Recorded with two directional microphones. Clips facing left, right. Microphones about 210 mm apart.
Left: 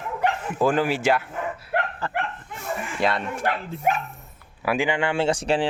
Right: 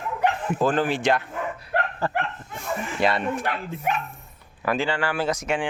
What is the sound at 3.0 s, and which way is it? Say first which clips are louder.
Speech: right 1 dB; centre (ahead or behind).